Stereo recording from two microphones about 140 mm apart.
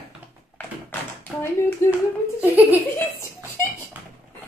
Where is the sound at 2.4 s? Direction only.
10° right (ahead or behind).